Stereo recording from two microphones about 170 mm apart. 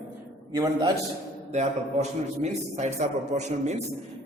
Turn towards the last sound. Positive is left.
turn(degrees=-40)  # may be behind; listen again after turning